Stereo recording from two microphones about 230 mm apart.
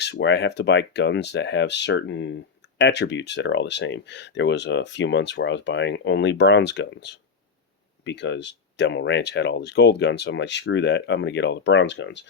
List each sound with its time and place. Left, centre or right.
0.0 s speech: left